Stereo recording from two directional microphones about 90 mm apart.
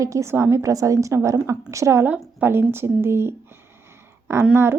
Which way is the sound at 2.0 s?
20° right (ahead or behind).